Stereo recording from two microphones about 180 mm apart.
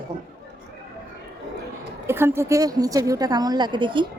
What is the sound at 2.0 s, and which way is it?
A woman's voice, 15° right (ahead or behind).